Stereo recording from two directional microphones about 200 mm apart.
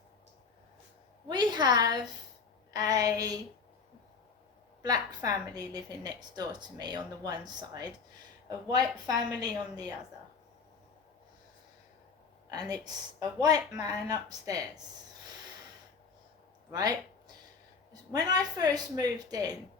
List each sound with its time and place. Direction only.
1.3 s a woman's voice: 20° right (ahead or behind)
4.8 s a woman's voice: 20° right (ahead or behind)
12.5 s a woman's voice: 20° right (ahead or behind)
16.7 s a woman's voice: 20° right (ahead or behind)